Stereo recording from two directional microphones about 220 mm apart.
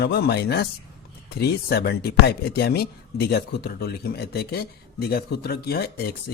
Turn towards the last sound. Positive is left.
turn(degrees=45)  # may be behind; listen again after turning